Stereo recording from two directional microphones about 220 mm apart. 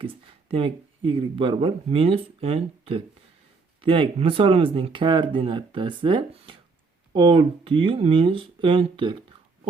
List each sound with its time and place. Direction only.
0.0 s speech: 25° right (ahead or behind)